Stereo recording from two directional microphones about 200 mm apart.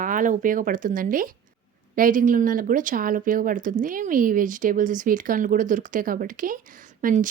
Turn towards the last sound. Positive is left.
turn(degrees=-40)  # may be behind; listen again after turning